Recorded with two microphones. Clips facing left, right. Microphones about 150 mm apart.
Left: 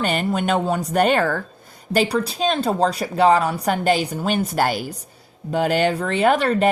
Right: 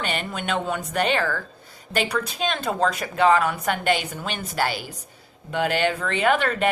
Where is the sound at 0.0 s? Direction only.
40° left (ahead or behind).